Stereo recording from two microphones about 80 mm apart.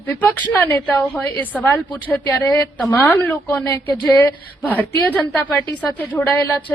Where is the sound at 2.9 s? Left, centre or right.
Left.